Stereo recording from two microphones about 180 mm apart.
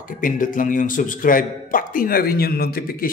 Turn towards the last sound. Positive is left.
turn(degrees=55)  # may be behind; listen again after turning